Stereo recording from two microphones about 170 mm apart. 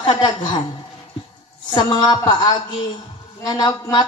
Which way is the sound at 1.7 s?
25° left (ahead or behind).